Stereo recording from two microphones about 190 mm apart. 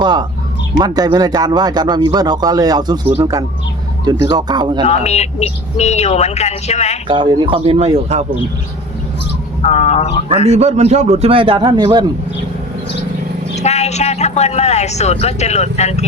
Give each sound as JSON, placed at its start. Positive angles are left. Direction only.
{"t": 0.0, "sound": "a sound", "side_deg": -20}
{"t": 0.8, "sound": "speech", "side_deg": -20}
{"t": 4.0, "sound": "speech", "side_deg": -20}
{"t": 4.9, "sound": "speech", "side_deg": 35}
{"t": 7.1, "sound": "speech", "side_deg": -25}
{"t": 9.6, "sound": "speech", "side_deg": 35}
{"t": 10.4, "sound": "a man's voice", "side_deg": -35}
{"t": 13.6, "sound": "speech", "side_deg": 35}